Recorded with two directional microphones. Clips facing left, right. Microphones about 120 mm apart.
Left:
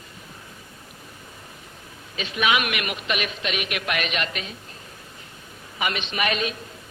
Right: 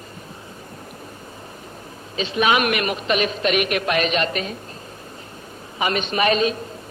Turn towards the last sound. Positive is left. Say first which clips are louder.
# right 7 dB
turn(degrees=-35)  # may be behind; listen again after turning